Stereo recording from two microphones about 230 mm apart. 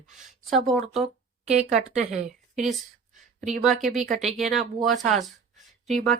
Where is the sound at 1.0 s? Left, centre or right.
Right.